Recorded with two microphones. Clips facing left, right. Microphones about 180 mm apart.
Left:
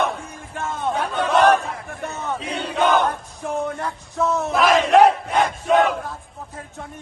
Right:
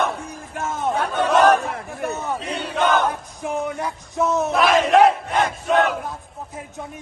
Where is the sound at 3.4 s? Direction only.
15° right (ahead or behind).